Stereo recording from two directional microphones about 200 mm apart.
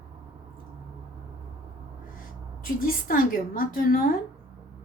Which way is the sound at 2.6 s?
45° left (ahead or behind).